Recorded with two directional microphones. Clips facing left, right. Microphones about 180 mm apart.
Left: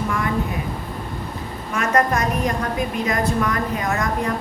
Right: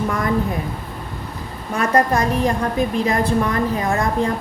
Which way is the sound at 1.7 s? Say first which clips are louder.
Right 2 dB; 30° right (ahead or behind).